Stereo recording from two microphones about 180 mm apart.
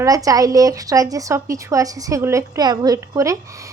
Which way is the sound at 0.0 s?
20° right (ahead or behind).